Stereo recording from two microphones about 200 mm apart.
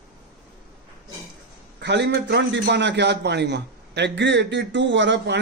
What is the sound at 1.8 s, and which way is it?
A man's voice, 60° right (ahead or behind).